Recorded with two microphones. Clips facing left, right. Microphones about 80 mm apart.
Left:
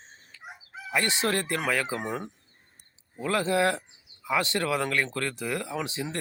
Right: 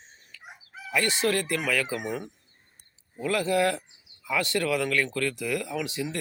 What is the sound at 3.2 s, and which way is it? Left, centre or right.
Speech, left.